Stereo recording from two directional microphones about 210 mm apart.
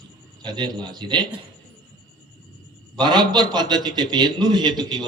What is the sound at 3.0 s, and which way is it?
A man's voice, 20° right (ahead or behind).